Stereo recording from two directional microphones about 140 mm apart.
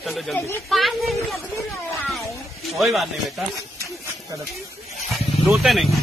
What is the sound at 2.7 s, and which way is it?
Speech, centre (ahead or behind).